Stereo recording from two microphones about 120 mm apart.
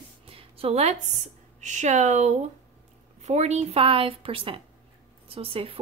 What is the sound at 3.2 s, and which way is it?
Speech, 65° right (ahead or behind).